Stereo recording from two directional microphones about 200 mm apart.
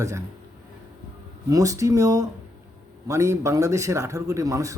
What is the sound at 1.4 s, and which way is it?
Speech, 15° right (ahead or behind).